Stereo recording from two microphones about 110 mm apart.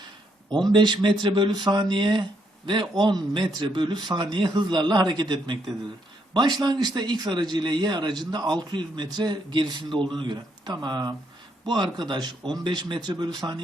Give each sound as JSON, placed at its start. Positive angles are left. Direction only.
{"t": 0.7, "sound": "a man's voice", "side_deg": -45}